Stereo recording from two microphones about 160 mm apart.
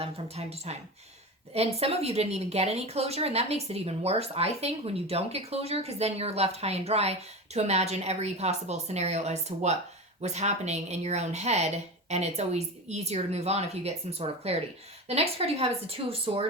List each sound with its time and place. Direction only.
0.0 s a woman's voice: 40° right (ahead or behind)